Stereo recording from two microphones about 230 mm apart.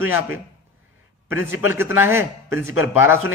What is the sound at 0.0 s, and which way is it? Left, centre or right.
Speech, centre.